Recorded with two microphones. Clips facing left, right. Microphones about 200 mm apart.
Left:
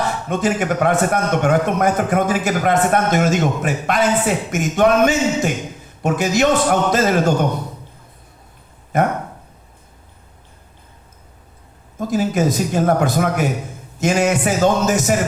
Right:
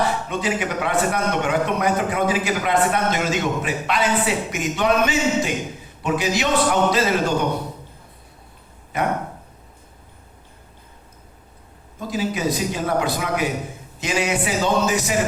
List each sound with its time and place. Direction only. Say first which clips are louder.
0.3 s a man's voice: left 5 dB; 45° left (ahead or behind)
8.9 s a man's voice: left 6 dB; 45° left (ahead or behind)
11.9 s a man's voice: left 6 dB; 45° left (ahead or behind)